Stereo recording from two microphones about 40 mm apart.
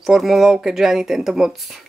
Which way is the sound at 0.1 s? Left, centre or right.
Centre.